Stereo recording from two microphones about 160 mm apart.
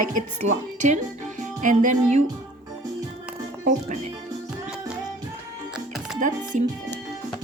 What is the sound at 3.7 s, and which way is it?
Music, 50° right (ahead or behind).